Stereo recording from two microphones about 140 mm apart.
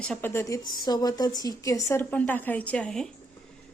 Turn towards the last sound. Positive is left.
turn(degrees=5)  # may be behind; listen again after turning